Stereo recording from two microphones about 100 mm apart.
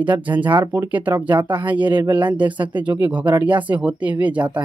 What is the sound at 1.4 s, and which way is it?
Speech, 50° right (ahead or behind).